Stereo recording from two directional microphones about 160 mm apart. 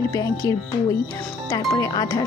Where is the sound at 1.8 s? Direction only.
25° left (ahead or behind).